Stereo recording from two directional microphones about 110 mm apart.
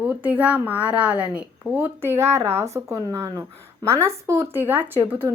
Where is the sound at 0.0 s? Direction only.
15° right (ahead or behind).